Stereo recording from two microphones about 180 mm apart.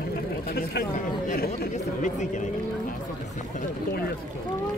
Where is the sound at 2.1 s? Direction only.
40° left (ahead or behind).